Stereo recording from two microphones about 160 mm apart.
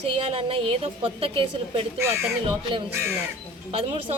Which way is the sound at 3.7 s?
35° right (ahead or behind).